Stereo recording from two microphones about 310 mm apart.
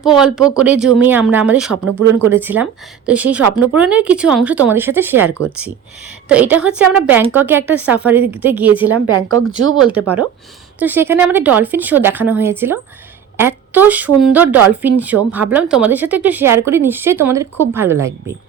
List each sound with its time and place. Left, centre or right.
0.0 s speech: centre
1.8 s speech: right
2.2 s a woman's voice: centre
8.9 s speech: right
9.8 s a woman's voice: centre